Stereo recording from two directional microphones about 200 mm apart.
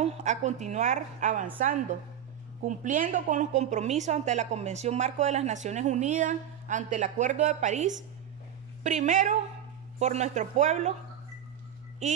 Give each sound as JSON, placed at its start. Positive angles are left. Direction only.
{"t": 0.0, "sound": "a woman's voice", "side_deg": -35}
{"t": 2.6, "sound": "a woman's voice", "side_deg": -40}